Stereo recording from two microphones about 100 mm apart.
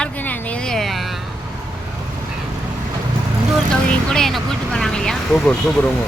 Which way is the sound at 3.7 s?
5° left (ahead or behind).